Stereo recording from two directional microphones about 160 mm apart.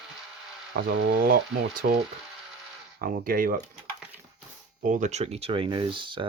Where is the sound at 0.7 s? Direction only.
70° right (ahead or behind).